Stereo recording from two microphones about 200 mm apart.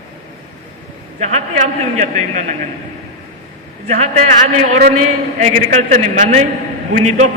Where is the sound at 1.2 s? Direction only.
35° right (ahead or behind).